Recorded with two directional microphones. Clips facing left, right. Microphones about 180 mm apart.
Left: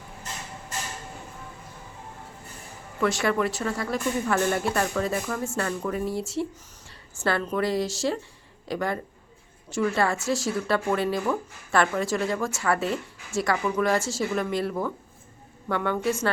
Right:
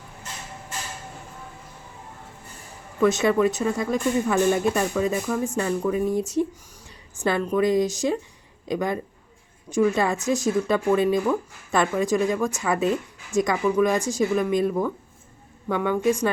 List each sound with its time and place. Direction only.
3.0 s speech: 20° right (ahead or behind)